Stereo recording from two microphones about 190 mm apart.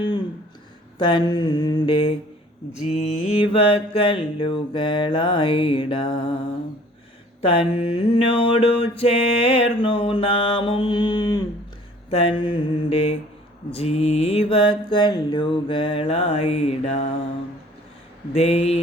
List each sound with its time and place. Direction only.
0.9 s mantra: 25° left (ahead or behind)
2.8 s mantra: 35° left (ahead or behind)
7.4 s mantra: 30° left (ahead or behind)
18.3 s mantra: 35° left (ahead or behind)